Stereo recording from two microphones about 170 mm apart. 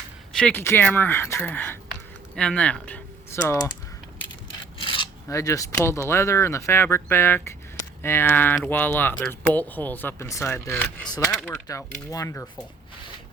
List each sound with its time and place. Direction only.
0.3 s speech: 10° left (ahead or behind)
1.9 s typing: 5° left (ahead or behind)
4.8 s filing: 30° left (ahead or behind)
5.3 s speech: 20° left (ahead or behind)
11.7 s speech: 20° left (ahead or behind)